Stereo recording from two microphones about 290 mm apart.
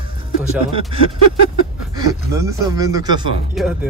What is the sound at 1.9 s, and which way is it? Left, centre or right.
Speech, centre.